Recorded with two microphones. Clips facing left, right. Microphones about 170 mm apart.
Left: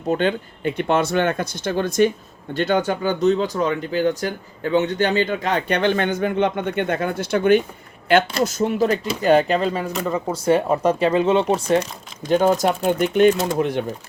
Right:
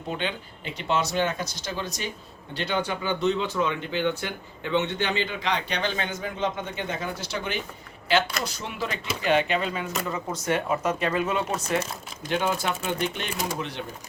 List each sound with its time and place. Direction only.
0.1 s speech: 45° left (ahead or behind); by 11.8 s 30° left (ahead or behind)
12.3 s speech: 40° left (ahead or behind)